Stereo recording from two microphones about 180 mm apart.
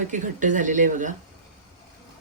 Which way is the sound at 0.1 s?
45° right (ahead or behind).